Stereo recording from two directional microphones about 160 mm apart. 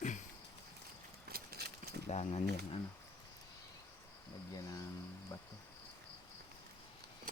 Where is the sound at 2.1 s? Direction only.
40° left (ahead or behind).